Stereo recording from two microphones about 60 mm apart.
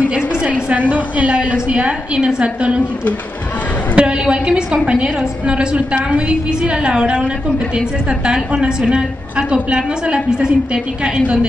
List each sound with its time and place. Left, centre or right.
0.1 s a woman's voice: right
3.9 s a woman's voice: centre
8.3 s a woman's voice: centre